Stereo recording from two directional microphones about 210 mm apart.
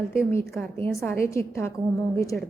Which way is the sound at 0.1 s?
10° left (ahead or behind).